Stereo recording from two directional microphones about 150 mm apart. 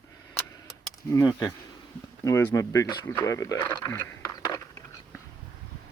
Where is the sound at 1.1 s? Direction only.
20° left (ahead or behind).